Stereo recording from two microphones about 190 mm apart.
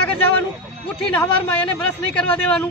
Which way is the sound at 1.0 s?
5° left (ahead or behind).